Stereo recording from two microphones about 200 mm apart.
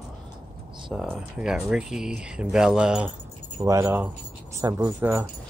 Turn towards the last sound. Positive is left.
turn(degrees=-10)  # may be behind; listen again after turning